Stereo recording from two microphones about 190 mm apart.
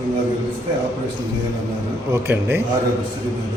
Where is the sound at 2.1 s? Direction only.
10° right (ahead or behind).